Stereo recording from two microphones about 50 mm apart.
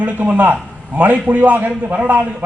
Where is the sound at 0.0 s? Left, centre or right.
Right.